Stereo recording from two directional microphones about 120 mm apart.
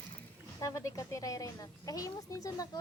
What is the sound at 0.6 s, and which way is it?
Speech, 25° left (ahead or behind).